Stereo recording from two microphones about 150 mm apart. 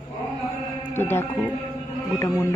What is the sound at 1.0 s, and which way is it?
Speech, 15° left (ahead or behind).